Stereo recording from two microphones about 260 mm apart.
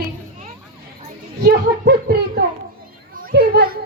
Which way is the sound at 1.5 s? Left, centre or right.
Right.